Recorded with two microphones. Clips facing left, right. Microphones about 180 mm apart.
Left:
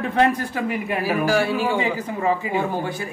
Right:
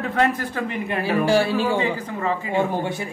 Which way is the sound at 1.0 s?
25° right (ahead or behind).